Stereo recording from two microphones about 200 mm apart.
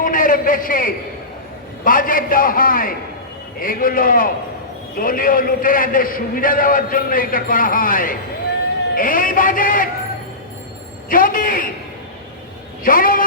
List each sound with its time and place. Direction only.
0.0 s a man's voice: 45° left (ahead or behind)
11.1 s a man's voice: 45° left (ahead or behind)
12.8 s a man's voice: 45° left (ahead or behind)